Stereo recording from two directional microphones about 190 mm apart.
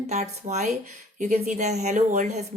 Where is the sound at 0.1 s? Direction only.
35° right (ahead or behind).